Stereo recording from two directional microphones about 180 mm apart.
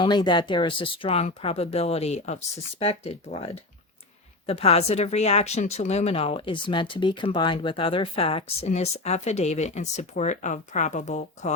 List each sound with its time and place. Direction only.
0.0 s a woman's voice: 25° left (ahead or behind); by 11.5 s 40° left (ahead or behind)